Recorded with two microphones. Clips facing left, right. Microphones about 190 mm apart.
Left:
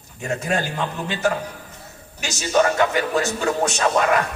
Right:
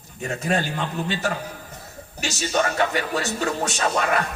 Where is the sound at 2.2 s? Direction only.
40° left (ahead or behind).